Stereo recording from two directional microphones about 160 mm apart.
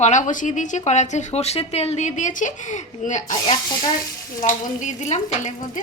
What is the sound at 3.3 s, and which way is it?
Speech, 25° left (ahead or behind).